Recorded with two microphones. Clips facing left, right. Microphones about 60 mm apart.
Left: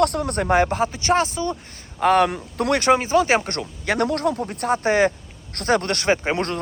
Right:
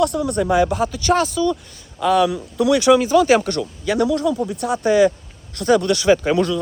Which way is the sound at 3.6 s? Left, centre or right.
Left.